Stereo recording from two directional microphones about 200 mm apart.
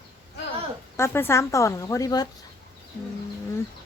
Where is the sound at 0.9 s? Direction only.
10° left (ahead or behind).